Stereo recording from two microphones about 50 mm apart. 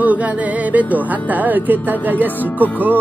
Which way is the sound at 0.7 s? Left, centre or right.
Right.